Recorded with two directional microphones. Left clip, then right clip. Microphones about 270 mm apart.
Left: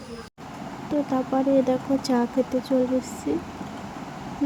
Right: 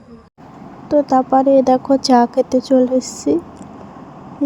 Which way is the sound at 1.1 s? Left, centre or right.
Centre.